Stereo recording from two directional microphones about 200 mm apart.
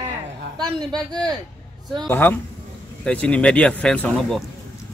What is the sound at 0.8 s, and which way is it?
Speech, 20° right (ahead or behind).